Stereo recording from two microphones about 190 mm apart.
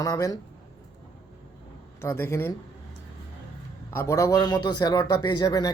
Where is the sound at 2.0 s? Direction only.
10° left (ahead or behind).